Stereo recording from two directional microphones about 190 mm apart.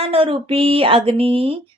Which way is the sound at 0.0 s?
30° right (ahead or behind).